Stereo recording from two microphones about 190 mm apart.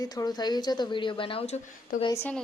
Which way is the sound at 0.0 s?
20° left (ahead or behind).